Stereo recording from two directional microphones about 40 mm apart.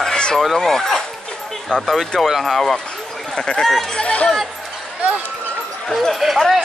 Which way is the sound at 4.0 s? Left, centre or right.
Left.